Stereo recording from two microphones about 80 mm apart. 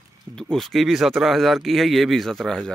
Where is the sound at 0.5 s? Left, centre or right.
Centre.